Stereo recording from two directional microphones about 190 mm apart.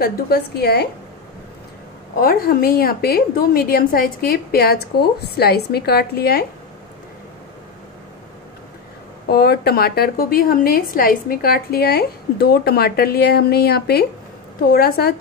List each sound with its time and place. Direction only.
0.0 s a woman's voice: 55° left (ahead or behind)
2.1 s a woman's voice: 50° left (ahead or behind)
9.3 s a woman's voice: 55° left (ahead or behind)